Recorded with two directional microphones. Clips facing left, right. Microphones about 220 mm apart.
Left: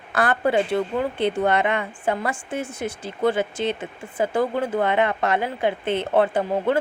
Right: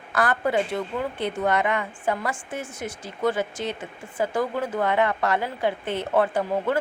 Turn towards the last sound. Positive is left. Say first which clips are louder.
# left 3 dB
turn(degrees=25)  # may be behind; listen again after turning